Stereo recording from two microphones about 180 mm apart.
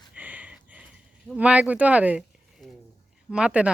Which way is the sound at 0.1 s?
10° right (ahead or behind).